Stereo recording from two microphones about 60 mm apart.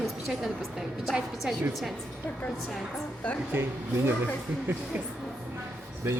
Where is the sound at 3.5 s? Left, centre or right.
Right.